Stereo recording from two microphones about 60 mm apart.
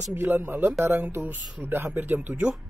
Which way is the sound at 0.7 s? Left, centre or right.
Right.